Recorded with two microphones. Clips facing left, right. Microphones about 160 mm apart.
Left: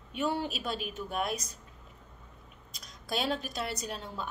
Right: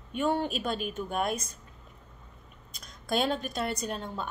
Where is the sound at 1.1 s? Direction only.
Centre (ahead or behind).